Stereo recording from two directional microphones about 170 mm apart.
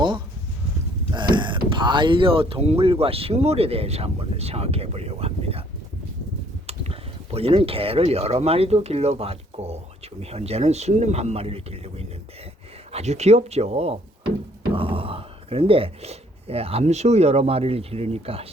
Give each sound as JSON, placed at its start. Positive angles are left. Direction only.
{"t": 1.1, "sound": "speech", "side_deg": -25}
{"t": 6.7, "sound": "speech", "side_deg": -35}